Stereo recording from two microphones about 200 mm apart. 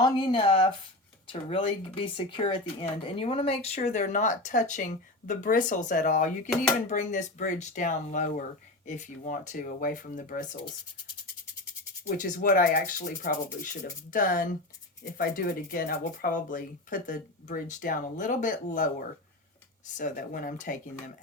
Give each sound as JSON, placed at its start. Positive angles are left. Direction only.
{"t": 0.0, "sound": "speech", "side_deg": 25}
{"t": 12.0, "sound": "speech", "side_deg": 40}